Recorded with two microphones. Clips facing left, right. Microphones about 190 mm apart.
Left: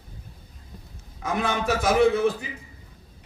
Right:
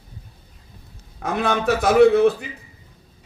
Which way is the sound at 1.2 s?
65° right (ahead or behind).